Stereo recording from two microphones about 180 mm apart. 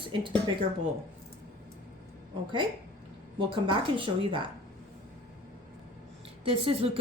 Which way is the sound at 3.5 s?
30° right (ahead or behind).